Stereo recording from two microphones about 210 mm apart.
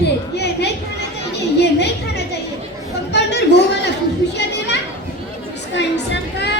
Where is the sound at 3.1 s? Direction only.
55° left (ahead or behind).